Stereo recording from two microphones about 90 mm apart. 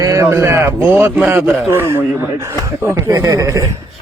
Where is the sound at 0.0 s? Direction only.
35° right (ahead or behind).